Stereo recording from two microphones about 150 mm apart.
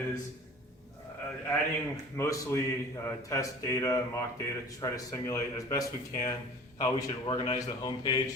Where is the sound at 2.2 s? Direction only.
15° left (ahead or behind).